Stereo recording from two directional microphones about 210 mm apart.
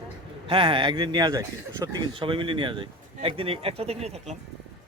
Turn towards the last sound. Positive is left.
turn(degrees=-30)  # may be behind; listen again after turning